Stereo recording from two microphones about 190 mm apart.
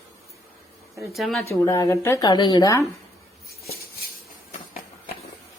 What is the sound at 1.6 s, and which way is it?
A woman's voice, 15° left (ahead or behind).